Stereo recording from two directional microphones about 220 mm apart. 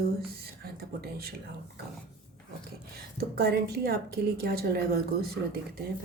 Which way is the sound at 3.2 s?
45° right (ahead or behind).